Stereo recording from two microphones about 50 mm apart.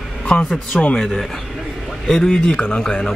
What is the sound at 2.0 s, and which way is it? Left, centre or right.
Speech, centre.